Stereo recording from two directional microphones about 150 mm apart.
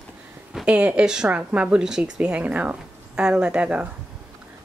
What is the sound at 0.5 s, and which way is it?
Speech, 5° right (ahead or behind).